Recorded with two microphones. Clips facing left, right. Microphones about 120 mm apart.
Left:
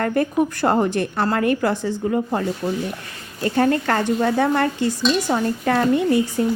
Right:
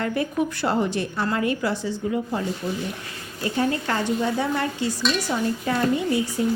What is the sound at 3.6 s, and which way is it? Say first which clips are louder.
A woman's voice: left 5 dB; 60° left (ahead or behind).